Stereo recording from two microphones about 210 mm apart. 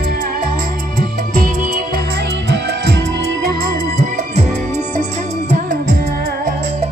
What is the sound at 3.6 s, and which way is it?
Music, 40° right (ahead or behind).